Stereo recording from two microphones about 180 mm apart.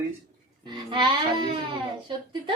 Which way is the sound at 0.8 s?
25° right (ahead or behind).